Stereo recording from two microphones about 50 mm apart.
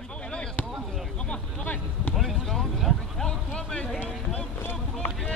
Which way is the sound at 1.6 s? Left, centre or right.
Left.